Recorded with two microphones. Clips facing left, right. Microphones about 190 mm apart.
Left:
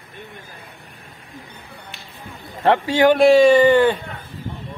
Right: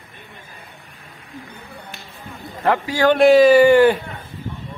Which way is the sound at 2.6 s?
25° left (ahead or behind).